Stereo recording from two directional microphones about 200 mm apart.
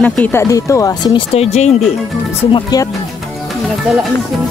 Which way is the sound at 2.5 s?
20° left (ahead or behind).